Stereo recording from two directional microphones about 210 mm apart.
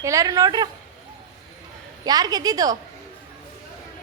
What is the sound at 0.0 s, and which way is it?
Speech, 15° right (ahead or behind).